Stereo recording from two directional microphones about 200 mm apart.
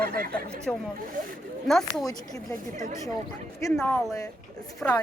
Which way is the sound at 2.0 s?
15° left (ahead or behind).